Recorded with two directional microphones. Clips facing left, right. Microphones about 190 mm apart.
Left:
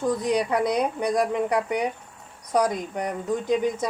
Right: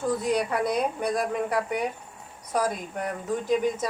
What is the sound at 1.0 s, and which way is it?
Speech, 15° left (ahead or behind).